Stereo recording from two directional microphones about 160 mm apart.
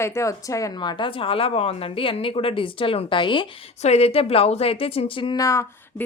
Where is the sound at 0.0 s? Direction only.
20° left (ahead or behind).